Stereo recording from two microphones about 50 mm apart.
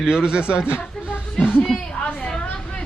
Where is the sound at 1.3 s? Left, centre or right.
Left.